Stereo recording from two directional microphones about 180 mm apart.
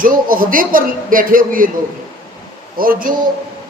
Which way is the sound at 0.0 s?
50° right (ahead or behind).